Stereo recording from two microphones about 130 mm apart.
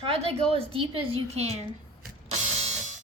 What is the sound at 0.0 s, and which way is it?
A woman's voice, 45° right (ahead or behind).